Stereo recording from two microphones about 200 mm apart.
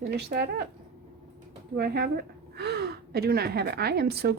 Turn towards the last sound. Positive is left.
turn(degrees=-55)  # may be behind; listen again after turning